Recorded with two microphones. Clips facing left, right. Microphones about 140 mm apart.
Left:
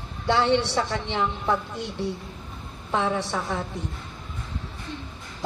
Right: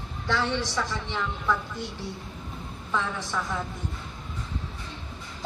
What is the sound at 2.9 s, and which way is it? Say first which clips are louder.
Speech: left 5 dB; 65° left (ahead or behind).